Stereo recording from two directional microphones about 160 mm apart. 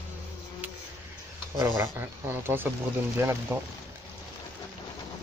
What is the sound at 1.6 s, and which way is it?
Speech, 15° right (ahead or behind).